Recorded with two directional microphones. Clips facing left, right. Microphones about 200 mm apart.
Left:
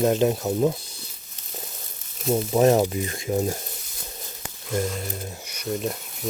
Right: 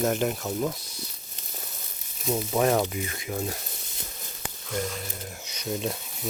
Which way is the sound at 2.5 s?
25° left (ahead or behind).